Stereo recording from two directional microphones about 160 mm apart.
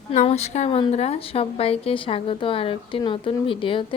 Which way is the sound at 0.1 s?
45° left (ahead or behind).